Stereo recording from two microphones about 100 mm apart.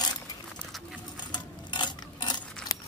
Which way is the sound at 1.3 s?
50° left (ahead or behind).